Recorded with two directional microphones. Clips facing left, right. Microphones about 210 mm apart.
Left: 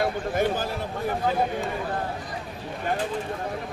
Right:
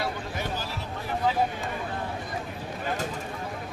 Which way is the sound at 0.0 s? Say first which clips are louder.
Left 8 dB; 50° left (ahead or behind).